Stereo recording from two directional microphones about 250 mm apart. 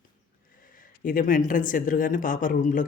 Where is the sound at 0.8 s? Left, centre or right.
Left.